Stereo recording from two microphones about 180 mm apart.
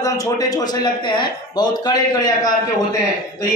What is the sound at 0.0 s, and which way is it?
A man's voice, 20° left (ahead or behind).